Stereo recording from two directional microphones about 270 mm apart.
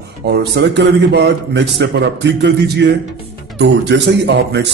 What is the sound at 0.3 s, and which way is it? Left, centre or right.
A man's voice, right.